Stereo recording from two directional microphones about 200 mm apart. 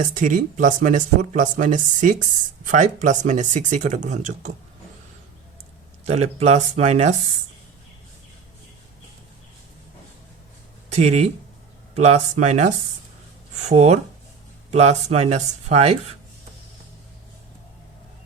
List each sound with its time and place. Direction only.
0.0 s speech: 40° right (ahead or behind)
6.1 s speech: 35° right (ahead or behind)
10.8 s speech: 35° right (ahead or behind)